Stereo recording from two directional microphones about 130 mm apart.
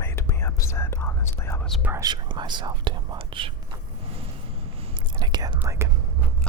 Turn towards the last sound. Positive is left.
turn(degrees=-20)  # may be behind; listen again after turning